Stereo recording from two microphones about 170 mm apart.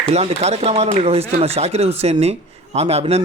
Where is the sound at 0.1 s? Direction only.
40° right (ahead or behind).